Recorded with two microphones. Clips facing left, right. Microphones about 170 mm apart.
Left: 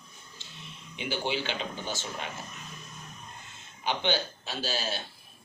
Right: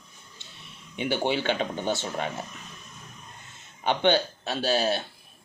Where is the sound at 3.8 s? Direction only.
55° right (ahead or behind).